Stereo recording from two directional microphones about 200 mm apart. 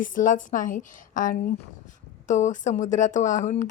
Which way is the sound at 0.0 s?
40° left (ahead or behind).